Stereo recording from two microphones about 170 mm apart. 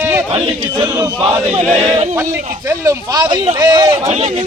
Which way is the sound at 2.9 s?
20° right (ahead or behind).